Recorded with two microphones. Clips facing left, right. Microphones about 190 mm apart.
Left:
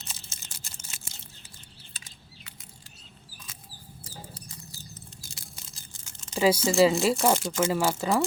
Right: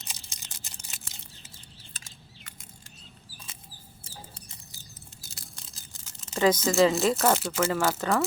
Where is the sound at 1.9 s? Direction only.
45° right (ahead or behind).